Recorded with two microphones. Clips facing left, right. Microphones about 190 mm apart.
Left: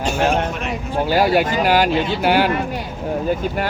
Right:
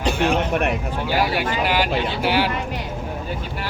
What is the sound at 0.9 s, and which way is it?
Speech, 45° left (ahead or behind).